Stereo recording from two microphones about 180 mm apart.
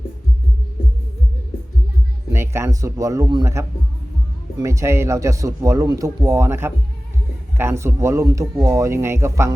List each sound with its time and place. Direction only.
2.3 s speech: 15° right (ahead or behind)